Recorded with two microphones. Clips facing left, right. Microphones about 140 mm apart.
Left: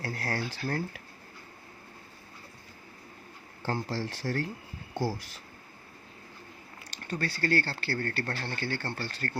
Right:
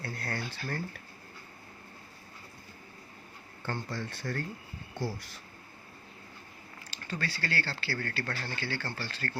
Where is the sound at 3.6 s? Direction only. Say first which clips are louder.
Left 4 dB; 35° left (ahead or behind).